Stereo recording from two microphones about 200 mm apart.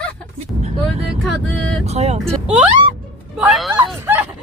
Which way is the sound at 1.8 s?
35° right (ahead or behind).